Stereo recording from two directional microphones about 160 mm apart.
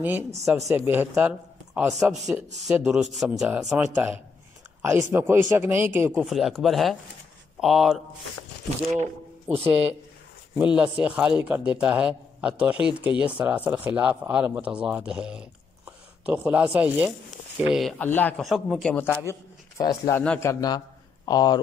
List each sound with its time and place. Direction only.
0.7 s a man's voice: 10° right (ahead or behind)
6.2 s speech: centre (ahead or behind)
9.0 s speech: 40° right (ahead or behind)
9.7 s a man's voice: 10° right (ahead or behind); by 18.3 s 10° left (ahead or behind)
18.4 s a man's voice: centre (ahead or behind); by 21.5 s 25° left (ahead or behind)